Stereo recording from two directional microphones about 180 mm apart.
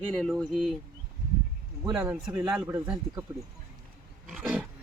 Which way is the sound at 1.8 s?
15° right (ahead or behind).